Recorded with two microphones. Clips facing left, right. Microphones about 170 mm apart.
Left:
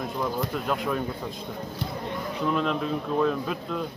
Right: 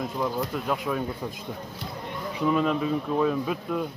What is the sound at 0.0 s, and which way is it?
Speech, centre (ahead or behind).